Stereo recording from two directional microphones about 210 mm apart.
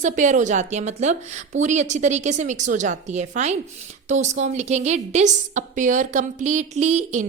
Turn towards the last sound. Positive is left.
turn(degrees=-35)  # may be behind; listen again after turning